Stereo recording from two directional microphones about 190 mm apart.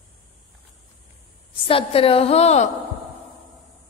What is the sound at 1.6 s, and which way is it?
A woman's voice, 30° left (ahead or behind).